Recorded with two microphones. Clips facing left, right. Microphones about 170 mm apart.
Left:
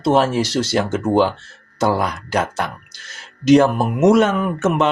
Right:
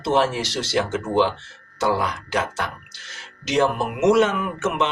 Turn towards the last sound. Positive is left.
turn(degrees=45)  # may be behind; listen again after turning